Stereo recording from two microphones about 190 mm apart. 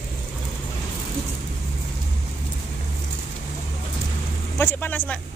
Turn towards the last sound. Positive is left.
turn(degrees=10)  # may be behind; listen again after turning